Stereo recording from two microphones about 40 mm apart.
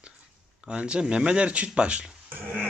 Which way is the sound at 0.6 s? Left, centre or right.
Right.